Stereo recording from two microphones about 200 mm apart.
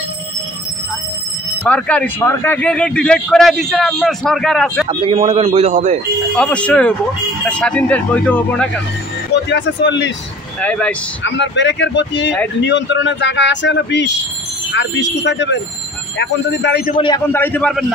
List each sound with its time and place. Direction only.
1.6 s speech: 5° left (ahead or behind)
4.8 s a man's voice: 30° right (ahead or behind)
6.3 s speech: 5° left (ahead or behind)
9.3 s speech: 60° left (ahead or behind)
10.6 s speech: 5° left (ahead or behind)
11.2 s speech: 60° left (ahead or behind)
16.9 s a man's voice: 25° left (ahead or behind)
17.3 s speech: 10° left (ahead or behind)